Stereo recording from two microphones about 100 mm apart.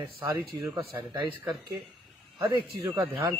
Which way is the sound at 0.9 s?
20° right (ahead or behind).